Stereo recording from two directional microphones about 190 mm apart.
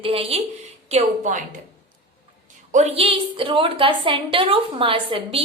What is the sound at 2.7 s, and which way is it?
A woman's voice, 35° right (ahead or behind).